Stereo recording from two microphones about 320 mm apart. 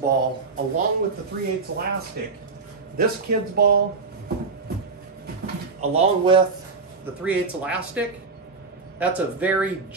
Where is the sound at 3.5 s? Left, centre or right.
Right.